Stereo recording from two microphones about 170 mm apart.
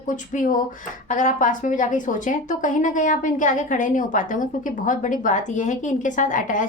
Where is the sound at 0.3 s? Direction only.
50° left (ahead or behind).